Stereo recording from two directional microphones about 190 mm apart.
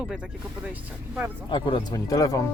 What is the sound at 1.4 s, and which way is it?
Speech, 25° left (ahead or behind).